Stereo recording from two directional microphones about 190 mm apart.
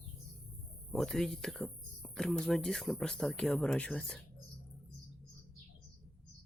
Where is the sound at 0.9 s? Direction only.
Centre (ahead or behind).